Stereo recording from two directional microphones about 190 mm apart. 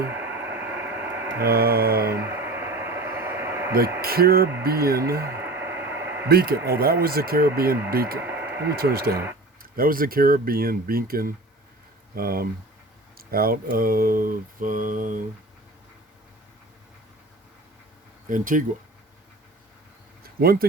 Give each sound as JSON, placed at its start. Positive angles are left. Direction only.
{"t": 0.0, "sound": "radio", "side_deg": -10}
{"t": 1.4, "sound": "speech", "side_deg": -55}
{"t": 2.0, "sound": "a sound", "side_deg": -10}
{"t": 4.0, "sound": "speech", "side_deg": -55}
{"t": 5.2, "sound": "a sound", "side_deg": -10}
{"t": 6.2, "sound": "speech", "side_deg": -55}
{"t": 8.2, "sound": "a sound", "side_deg": -10}
{"t": 8.6, "sound": "speech", "side_deg": -55}
{"t": 18.3, "sound": "speech", "side_deg": -45}
{"t": 20.4, "sound": "speech", "side_deg": -50}